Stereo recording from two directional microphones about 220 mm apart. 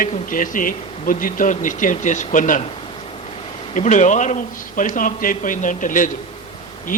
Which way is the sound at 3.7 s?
35° left (ahead or behind).